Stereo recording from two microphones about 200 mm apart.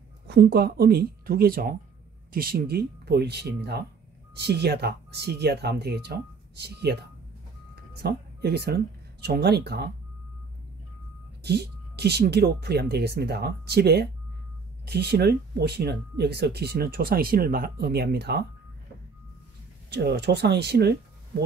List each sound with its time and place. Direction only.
0.3 s speech: 50° right (ahead or behind)
11.4 s speech: 55° right (ahead or behind)
19.9 s speech: 55° right (ahead or behind)